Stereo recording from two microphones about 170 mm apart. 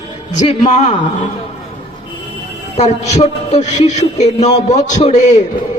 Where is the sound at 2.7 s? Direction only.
40° left (ahead or behind).